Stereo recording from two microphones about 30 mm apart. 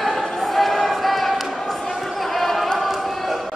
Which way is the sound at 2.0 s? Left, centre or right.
Centre.